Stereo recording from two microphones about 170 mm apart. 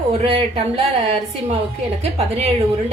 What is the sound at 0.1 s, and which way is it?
Speech, 35° right (ahead or behind).